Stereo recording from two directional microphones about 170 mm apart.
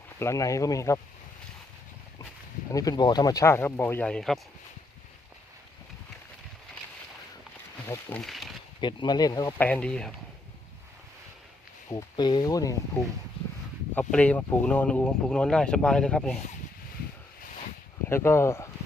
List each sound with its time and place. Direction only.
0.2 s speech: 20° left (ahead or behind)
2.6 s speech: 20° left (ahead or behind); by 4.4 s 5° left (ahead or behind)
8.2 s speech: centre (ahead or behind)
8.8 s speech: 25° left (ahead or behind)
9.6 s speech: 10° left (ahead or behind)
11.9 s speech: 20° left (ahead or behind)
13.9 s speech: 10° left (ahead or behind)
18.1 s speech: 15° left (ahead or behind)